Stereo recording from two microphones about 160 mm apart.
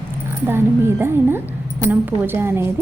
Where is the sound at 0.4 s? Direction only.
15° right (ahead or behind).